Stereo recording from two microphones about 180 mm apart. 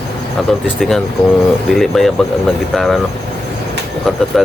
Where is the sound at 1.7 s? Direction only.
Centre (ahead or behind).